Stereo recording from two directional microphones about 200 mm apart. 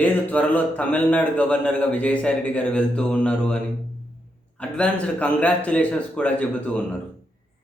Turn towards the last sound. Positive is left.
turn(degrees=5)  # may be behind; listen again after turning